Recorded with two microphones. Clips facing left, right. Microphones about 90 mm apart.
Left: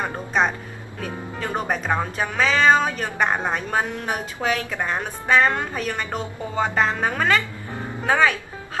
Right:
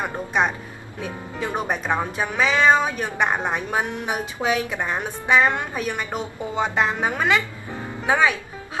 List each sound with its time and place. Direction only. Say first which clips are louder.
0.0 s speech: even; 15° right (ahead or behind)